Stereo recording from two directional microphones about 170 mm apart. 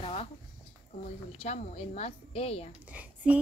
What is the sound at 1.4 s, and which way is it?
A woman's voice, 40° left (ahead or behind).